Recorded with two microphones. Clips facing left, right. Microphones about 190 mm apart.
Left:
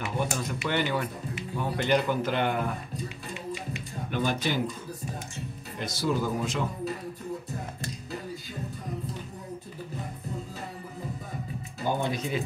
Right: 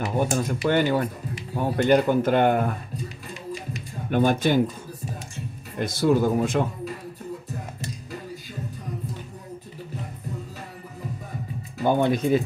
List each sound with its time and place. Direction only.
0.0 s speech: 40° right (ahead or behind)
4.1 s speech: 50° right (ahead or behind)
5.8 s speech: 55° right (ahead or behind)
11.8 s speech: 65° right (ahead or behind)